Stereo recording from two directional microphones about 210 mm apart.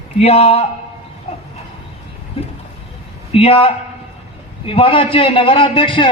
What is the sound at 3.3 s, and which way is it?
A man's voice, 30° left (ahead or behind).